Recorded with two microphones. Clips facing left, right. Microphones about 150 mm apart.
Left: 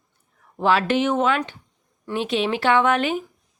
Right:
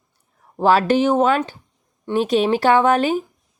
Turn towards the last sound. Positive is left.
turn(degrees=-40)  # may be behind; listen again after turning